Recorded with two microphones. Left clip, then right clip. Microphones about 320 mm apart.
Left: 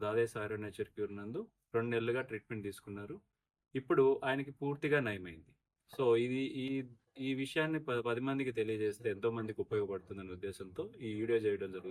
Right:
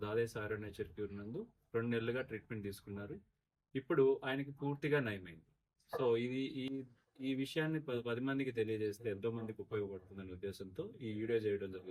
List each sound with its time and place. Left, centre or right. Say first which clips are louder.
0.0 s speech: left 4 dB; centre